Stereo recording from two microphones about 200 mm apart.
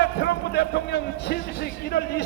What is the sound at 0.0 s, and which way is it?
A man's voice, 55° left (ahead or behind).